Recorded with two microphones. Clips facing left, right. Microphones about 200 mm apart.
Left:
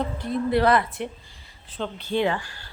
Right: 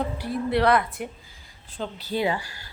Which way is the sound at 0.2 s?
5° right (ahead or behind).